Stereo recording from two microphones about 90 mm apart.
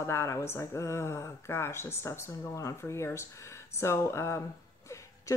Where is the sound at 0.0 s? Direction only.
30° left (ahead or behind).